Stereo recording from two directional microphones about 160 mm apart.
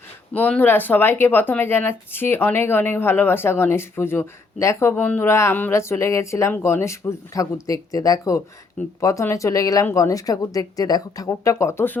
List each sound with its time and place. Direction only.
0.3 s speech: 10° left (ahead or behind)